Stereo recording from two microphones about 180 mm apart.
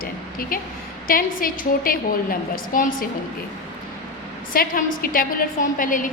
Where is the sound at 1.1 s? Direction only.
50° left (ahead or behind).